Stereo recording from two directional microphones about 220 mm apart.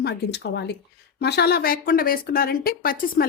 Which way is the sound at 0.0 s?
50° left (ahead or behind).